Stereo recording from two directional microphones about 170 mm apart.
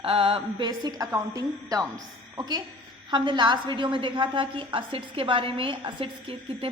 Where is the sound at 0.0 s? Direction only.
35° right (ahead or behind).